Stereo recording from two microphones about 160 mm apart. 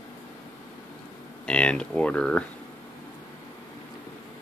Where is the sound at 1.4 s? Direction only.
5° left (ahead or behind).